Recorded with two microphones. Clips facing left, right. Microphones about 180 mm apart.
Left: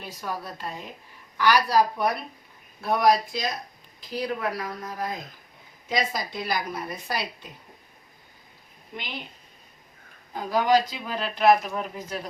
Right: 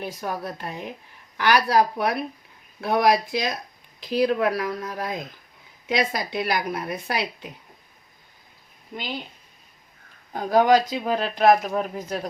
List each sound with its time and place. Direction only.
0.0 s a woman's voice: 55° right (ahead or behind)
2.8 s speech: 80° right
5.9 s a woman's voice: 70° right (ahead or behind)
10.5 s speech: 50° right (ahead or behind)